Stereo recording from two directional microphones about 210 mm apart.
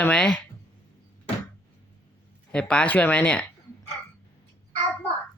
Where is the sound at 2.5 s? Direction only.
5° left (ahead or behind).